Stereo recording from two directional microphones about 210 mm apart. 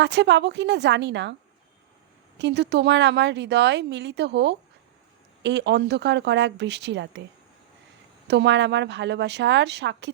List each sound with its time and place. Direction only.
0.0 s speech: 55° right (ahead or behind)
2.4 s speech: 55° right (ahead or behind)
8.3 s speech: 55° right (ahead or behind)